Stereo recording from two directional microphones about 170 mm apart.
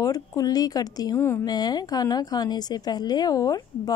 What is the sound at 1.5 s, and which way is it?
A woman's voice, 25° left (ahead or behind).